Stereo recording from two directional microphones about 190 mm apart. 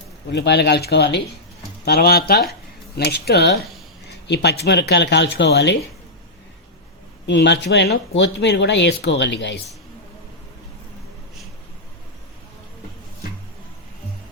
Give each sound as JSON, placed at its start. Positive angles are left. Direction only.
{"t": 0.3, "sound": "speech", "side_deg": 60}
{"t": 7.3, "sound": "speech", "side_deg": 65}